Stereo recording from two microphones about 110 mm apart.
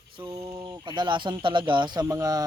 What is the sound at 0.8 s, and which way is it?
Speech, 45° right (ahead or behind).